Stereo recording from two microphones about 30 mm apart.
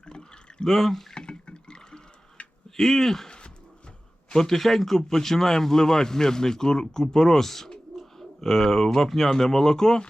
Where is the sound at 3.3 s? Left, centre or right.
Left.